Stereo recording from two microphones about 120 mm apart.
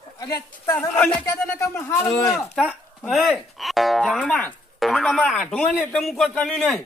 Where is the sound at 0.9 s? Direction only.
10° left (ahead or behind).